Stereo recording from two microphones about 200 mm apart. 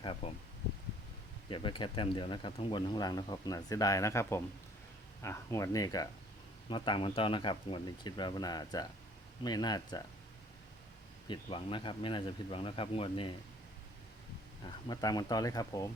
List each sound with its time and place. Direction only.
0.2 s speech: 30° left (ahead or behind)
1.5 s speech: 25° left (ahead or behind)
11.3 s speech: 25° left (ahead or behind)
14.8 s speech: 20° left (ahead or behind)